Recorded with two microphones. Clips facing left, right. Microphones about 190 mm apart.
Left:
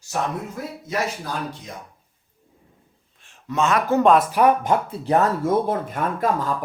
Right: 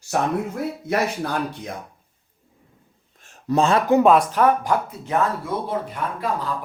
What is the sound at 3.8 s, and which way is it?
Speech, 15° right (ahead or behind).